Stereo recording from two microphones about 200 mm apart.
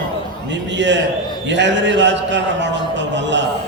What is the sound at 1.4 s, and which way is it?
A man's voice, 60° right (ahead or behind).